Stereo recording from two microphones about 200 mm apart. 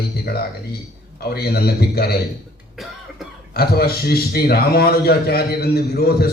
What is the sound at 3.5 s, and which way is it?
A man's voice, 50° left (ahead or behind).